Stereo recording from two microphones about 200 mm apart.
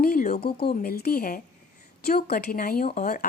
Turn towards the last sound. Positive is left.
turn(degrees=40)  # may be behind; listen again after turning